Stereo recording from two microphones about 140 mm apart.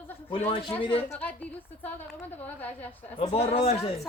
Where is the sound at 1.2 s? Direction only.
10° left (ahead or behind).